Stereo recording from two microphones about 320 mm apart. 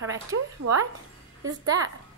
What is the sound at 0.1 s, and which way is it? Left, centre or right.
Speech, centre.